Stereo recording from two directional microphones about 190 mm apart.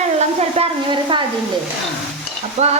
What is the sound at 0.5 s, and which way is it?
Stir, 25° right (ahead or behind).